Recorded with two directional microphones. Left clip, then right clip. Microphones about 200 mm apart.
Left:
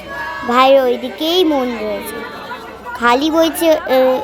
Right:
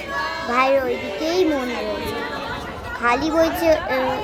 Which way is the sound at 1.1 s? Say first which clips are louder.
Left 4 dB; 75° left (ahead or behind).